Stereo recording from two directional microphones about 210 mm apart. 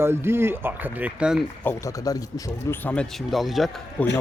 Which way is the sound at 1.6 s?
15° left (ahead or behind).